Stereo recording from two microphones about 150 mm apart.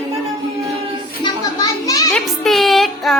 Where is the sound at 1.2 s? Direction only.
25° left (ahead or behind).